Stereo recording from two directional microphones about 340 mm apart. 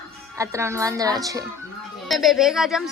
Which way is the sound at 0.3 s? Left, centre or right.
Centre.